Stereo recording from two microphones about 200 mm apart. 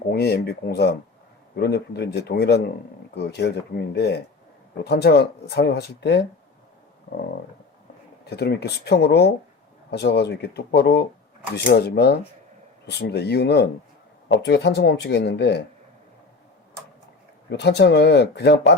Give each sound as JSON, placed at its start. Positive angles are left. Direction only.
{"t": 0.1, "sound": "speech", "side_deg": 55}
{"t": 8.2, "sound": "speech", "side_deg": 55}
{"t": 17.5, "sound": "speech", "side_deg": 55}